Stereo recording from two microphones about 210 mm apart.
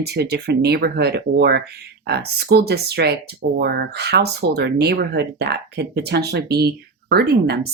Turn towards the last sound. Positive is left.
turn(degrees=-50)  # may be behind; listen again after turning